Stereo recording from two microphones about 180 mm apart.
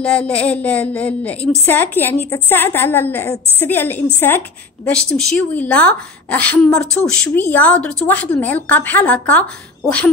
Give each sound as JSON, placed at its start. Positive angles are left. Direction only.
{"t": 0.0, "sound": "a woman's voice", "side_deg": 5}
{"t": 5.1, "sound": "a woman's voice", "side_deg": 5}